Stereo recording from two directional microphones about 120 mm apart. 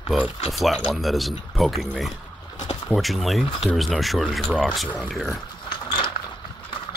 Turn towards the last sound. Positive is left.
turn(degrees=45)  # may be behind; listen again after turning